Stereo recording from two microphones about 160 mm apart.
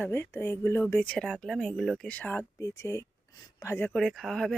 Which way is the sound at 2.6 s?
20° left (ahead or behind).